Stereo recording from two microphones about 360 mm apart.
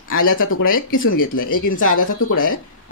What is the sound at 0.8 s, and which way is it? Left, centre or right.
Speech, left.